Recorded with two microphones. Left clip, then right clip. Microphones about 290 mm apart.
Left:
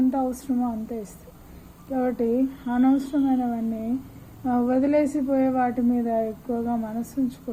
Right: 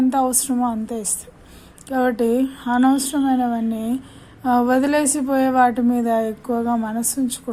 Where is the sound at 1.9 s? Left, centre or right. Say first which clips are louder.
Right 6 dB; right.